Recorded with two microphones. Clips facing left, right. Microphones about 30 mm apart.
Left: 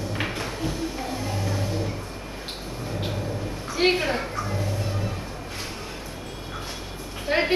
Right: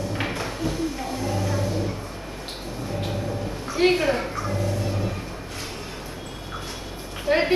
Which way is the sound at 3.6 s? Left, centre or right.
Centre.